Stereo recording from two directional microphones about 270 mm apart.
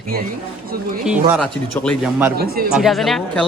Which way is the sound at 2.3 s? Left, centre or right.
Right.